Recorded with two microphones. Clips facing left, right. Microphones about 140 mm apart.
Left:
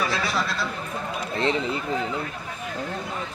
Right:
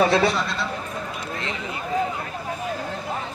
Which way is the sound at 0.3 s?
Centre (ahead or behind).